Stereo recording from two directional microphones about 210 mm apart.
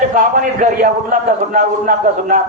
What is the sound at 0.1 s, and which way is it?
A woman's voice, 35° right (ahead or behind).